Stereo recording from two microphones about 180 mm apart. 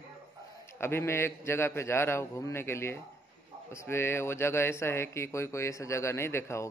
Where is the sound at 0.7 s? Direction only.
15° left (ahead or behind).